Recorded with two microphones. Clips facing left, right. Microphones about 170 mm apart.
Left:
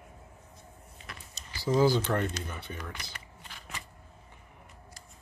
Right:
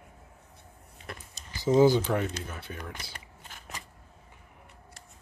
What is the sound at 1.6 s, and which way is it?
Speech, 20° right (ahead or behind).